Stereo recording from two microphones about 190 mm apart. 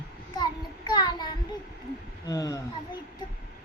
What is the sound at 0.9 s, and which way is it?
Child singing, 20° left (ahead or behind).